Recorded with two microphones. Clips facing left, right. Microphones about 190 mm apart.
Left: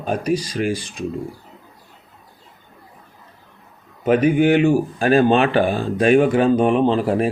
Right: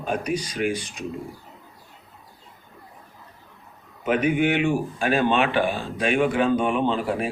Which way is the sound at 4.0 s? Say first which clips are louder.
Left 6 dB; 40° left (ahead or behind).